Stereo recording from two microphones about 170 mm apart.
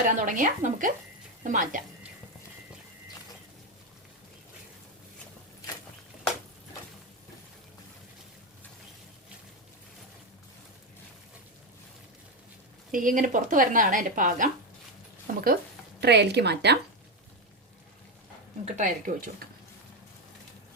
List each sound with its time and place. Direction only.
0.0 s speech: 50° right (ahead or behind)
12.9 s speech: 55° right (ahead or behind)
16.0 s a woman's voice: 80° right
18.6 s speech: 50° right (ahead or behind)